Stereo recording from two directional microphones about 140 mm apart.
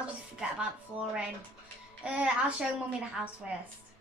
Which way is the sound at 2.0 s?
10° right (ahead or behind).